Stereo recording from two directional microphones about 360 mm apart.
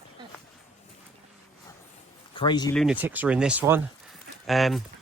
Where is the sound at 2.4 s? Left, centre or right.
Centre.